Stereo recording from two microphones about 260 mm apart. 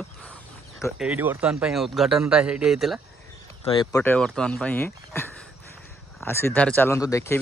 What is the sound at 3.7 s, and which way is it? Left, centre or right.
Speech, centre.